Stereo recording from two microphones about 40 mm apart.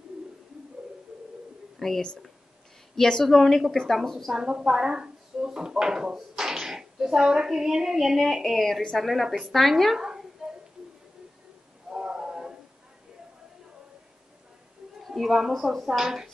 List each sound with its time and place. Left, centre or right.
1.8 s speech: centre
3.0 s a woman's voice: centre
3.3 s a woman's voice: centre
4.3 s a woman's voice: centre
8.3 s a woman's voice: centre
9.9 s a sound: centre
11.9 s a sound: right
15.0 s a woman's voice: centre